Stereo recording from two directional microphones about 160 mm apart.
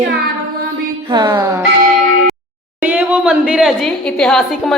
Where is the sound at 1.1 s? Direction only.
20° right (ahead or behind).